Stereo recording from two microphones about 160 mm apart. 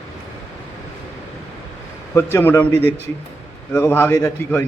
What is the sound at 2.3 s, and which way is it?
A man's voice, 15° left (ahead or behind).